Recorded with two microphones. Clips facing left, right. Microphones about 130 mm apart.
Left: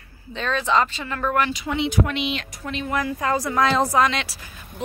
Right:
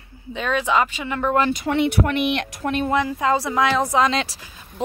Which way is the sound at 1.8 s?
60° right (ahead or behind).